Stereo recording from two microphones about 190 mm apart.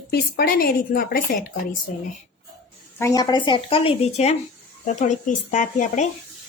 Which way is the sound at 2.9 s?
15° left (ahead or behind).